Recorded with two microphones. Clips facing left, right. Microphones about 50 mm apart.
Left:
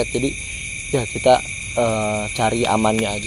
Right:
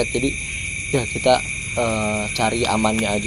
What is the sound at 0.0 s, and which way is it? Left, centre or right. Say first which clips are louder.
Speech: even; centre.